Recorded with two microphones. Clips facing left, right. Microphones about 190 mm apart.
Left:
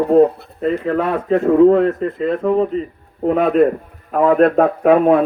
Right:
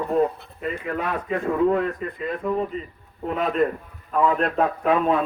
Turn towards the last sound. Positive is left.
turn(degrees=55)  # may be behind; listen again after turning